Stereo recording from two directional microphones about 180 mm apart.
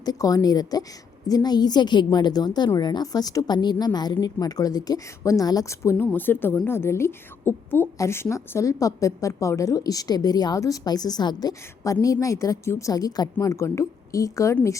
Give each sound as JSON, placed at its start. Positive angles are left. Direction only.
{"t": 0.0, "sound": "a woman's voice", "side_deg": 20}